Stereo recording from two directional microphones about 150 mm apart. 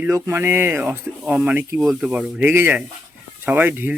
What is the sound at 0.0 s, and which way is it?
Speech, 15° right (ahead or behind).